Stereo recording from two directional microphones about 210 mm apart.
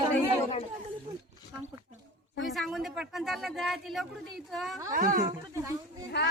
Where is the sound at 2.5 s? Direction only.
Centre (ahead or behind).